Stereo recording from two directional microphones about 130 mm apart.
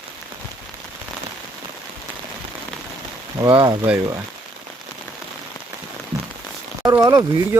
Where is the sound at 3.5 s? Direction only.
40° right (ahead or behind).